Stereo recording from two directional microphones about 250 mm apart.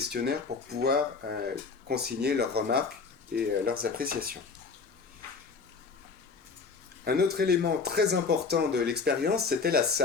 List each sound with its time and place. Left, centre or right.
0.1 s speech: right
7.0 s speech: right